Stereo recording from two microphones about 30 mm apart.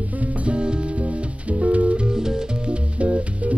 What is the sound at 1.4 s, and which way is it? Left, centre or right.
Music, right.